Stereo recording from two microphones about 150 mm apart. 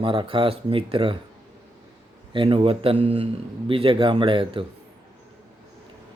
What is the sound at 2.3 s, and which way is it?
Speech, 35° right (ahead or behind).